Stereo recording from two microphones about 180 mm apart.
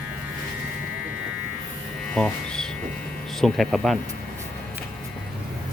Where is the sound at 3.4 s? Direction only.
Centre (ahead or behind).